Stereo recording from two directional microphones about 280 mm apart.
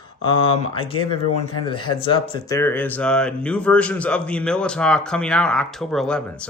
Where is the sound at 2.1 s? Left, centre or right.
Centre.